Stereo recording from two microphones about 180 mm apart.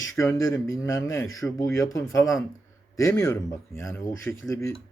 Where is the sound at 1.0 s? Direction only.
90° left.